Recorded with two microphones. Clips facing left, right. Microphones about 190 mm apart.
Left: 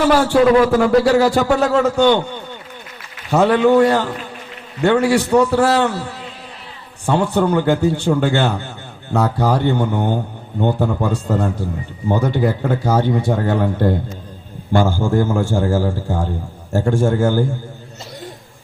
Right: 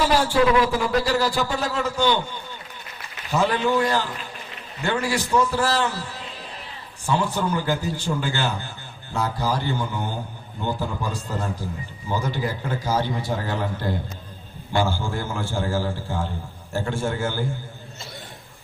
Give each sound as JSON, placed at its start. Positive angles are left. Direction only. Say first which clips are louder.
{"t": 0.0, "sound": "a man's voice", "louder": "left 6 dB", "side_deg": 60}
{"t": 0.5, "sound": "a man's voice", "louder": "left 8 dB", "side_deg": 50}
{"t": 1.5, "sound": "a man's voice", "louder": "left 11 dB", "side_deg": 65}
{"t": 3.3, "sound": "a man's voice", "louder": "left 9 dB", "side_deg": 60}